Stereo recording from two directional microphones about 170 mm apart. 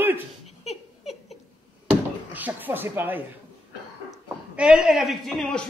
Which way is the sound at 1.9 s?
10° right (ahead or behind).